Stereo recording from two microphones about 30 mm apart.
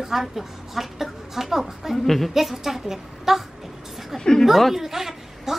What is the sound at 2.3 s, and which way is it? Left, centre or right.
A woman's voice, centre.